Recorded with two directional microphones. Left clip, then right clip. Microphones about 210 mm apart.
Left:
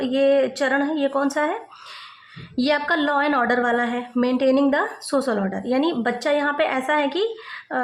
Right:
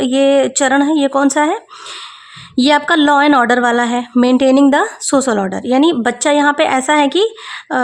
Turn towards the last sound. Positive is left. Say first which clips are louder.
# right 8 dB
turn(degrees=-50)  # may be behind; listen again after turning